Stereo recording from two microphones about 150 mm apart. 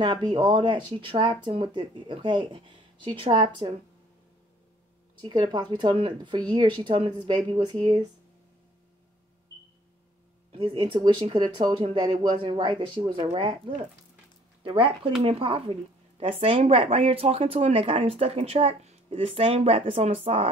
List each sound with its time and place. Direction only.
0.0 s speech: 30° right (ahead or behind)
5.2 s speech: 30° right (ahead or behind)
10.5 s speech: 35° right (ahead or behind)